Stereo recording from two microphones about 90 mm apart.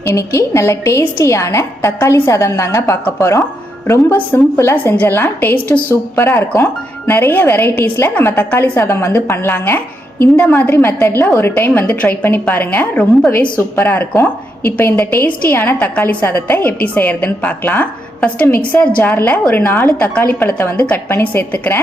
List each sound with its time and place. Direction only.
0.0 s a woman's voice: 30° left (ahead or behind); by 13.5 s 10° left (ahead or behind)
13.6 s a woman's voice: 25° left (ahead or behind)
20.7 s a woman's voice: 15° left (ahead or behind)
21.1 s a woman's voice: 25° left (ahead or behind)